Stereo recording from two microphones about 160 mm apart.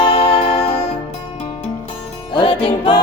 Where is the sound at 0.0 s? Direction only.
35° left (ahead or behind).